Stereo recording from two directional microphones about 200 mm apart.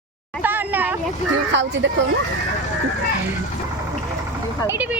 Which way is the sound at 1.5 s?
65° right (ahead or behind).